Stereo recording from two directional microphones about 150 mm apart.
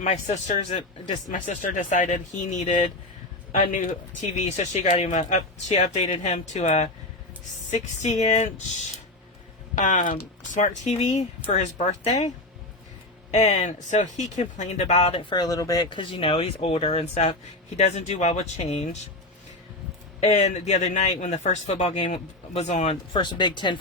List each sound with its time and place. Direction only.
0.0 s speech: 50° left (ahead or behind)
8.2 s speech: 45° left (ahead or behind)
9.7 s speech: 55° left (ahead or behind)
13.3 s speech: 50° left (ahead or behind)
20.2 s speech: 50° left (ahead or behind)
23.1 s speech: 30° left (ahead or behind)